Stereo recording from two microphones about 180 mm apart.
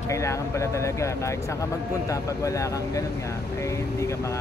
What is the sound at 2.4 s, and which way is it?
Speech, 15° left (ahead or behind).